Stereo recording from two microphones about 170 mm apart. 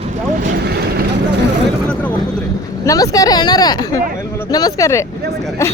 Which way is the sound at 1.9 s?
10° left (ahead or behind).